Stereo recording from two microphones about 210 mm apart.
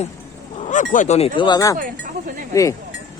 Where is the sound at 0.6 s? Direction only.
35° left (ahead or behind); by 1.7 s 20° left (ahead or behind).